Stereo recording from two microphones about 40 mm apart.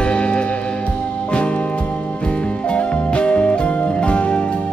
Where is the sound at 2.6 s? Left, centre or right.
Left.